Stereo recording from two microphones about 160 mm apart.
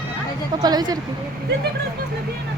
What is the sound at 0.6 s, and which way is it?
Speech, 25° right (ahead or behind).